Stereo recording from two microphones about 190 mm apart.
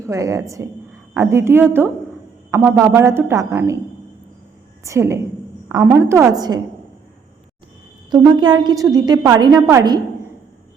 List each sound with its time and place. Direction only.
0.0 s a woman's voice: 15° right (ahead or behind)
4.8 s a woman's voice: 15° right (ahead or behind)
8.1 s a woman's voice: 25° right (ahead or behind)